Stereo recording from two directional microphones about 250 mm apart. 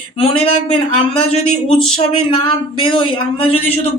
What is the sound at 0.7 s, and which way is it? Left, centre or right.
Speech, left.